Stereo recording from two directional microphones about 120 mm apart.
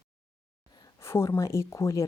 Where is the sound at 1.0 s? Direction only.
20° left (ahead or behind).